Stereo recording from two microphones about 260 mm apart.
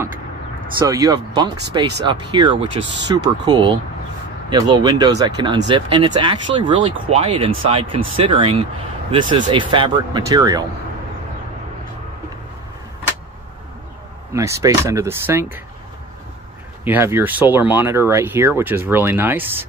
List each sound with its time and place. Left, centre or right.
0.8 s speech: centre
14.3 s speech: centre
16.8 s speech: centre